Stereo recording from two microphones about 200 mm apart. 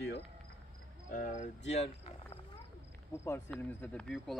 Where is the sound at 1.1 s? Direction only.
40° left (ahead or behind).